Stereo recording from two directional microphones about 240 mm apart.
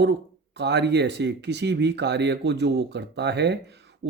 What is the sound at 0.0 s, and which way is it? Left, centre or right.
Speech, right.